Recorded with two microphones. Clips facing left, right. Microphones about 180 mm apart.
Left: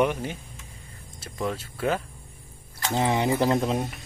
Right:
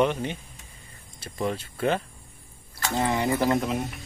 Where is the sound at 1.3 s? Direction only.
Centre (ahead or behind).